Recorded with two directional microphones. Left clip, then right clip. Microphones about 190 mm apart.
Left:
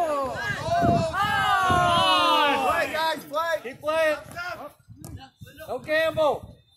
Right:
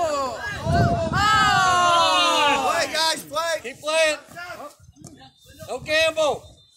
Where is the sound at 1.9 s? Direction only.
55° right (ahead or behind).